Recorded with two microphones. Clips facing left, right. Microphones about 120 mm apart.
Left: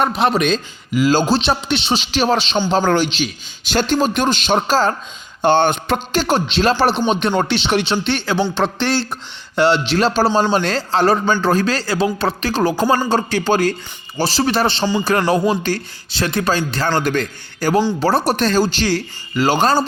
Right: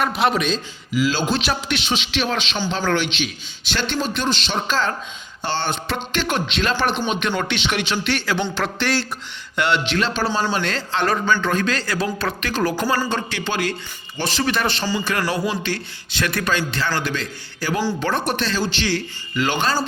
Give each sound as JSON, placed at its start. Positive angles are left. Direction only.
{"t": 0.0, "sound": "speech", "side_deg": 25}
{"t": 0.3, "sound": "a man's voice", "side_deg": 55}
{"t": 5.4, "sound": "a man's voice", "side_deg": 55}
{"t": 6.1, "sound": "a man's voice", "side_deg": 35}
{"t": 15.3, "sound": "a man's voice", "side_deg": 40}